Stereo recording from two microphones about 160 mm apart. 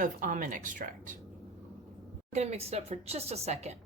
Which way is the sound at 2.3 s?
45° right (ahead or behind).